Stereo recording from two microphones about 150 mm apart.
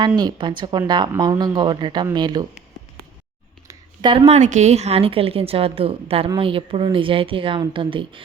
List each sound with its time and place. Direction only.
0.2 s speech: 30° right (ahead or behind)
3.7 s a sound: 30° right (ahead or behind)
4.3 s a woman's voice: 50° right (ahead or behind); by 8.2 s 35° right (ahead or behind)